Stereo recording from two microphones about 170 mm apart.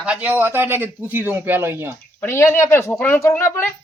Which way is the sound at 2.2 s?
15° left (ahead or behind).